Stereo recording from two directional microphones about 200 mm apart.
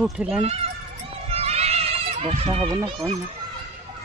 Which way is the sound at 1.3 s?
30° right (ahead or behind).